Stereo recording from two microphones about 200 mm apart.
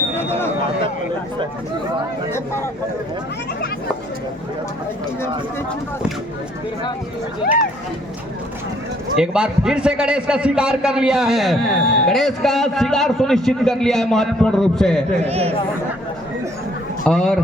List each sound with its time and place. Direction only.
0.2 s speech: 10° left (ahead or behind)
2.3 s speech: 10° left (ahead or behind)
9.1 s a man's voice: 5° right (ahead or behind)
15.3 s speech: 30° right (ahead or behind)
17.1 s a man's voice: 5° left (ahead or behind)